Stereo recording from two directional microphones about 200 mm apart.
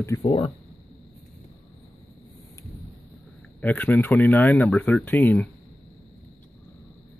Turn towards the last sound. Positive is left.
turn(degrees=10)  # may be behind; listen again after turning